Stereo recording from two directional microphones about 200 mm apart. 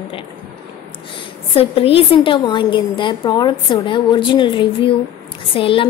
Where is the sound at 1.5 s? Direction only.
30° left (ahead or behind).